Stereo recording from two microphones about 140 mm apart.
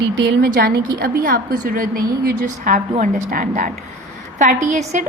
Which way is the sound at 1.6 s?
75° right (ahead or behind).